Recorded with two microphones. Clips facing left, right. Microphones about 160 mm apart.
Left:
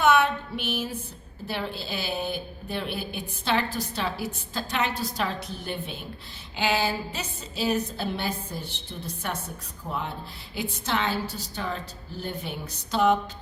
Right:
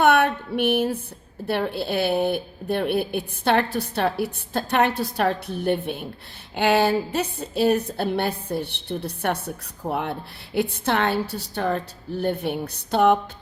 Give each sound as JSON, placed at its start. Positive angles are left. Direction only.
{"t": 0.0, "sound": "a woman's voice", "side_deg": -60}